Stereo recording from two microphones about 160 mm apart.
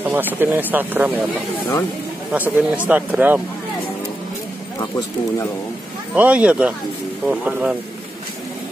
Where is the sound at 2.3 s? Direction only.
10° right (ahead or behind).